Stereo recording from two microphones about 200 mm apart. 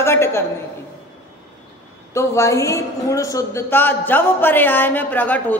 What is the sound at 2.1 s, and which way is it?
Speech, 15° left (ahead or behind).